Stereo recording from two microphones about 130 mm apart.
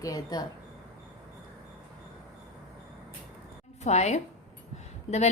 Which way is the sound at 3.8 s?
60° left (ahead or behind).